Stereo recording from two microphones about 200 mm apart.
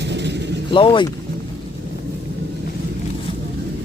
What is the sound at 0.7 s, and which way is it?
Speech, 25° left (ahead or behind).